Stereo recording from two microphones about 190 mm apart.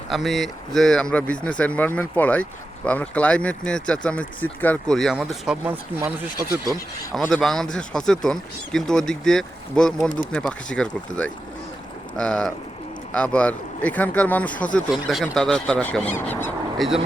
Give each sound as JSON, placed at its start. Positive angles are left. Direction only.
{"t": 0.1, "sound": "speech", "side_deg": 0}
{"t": 7.1, "sound": "speech", "side_deg": 0}